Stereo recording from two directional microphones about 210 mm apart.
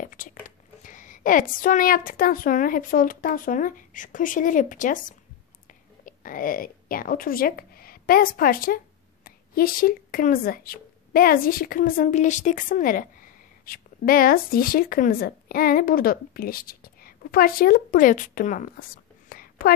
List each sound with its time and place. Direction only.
0.0 s biting: 40° left (ahead or behind)
0.8 s a woman's voice: 40° left (ahead or behind)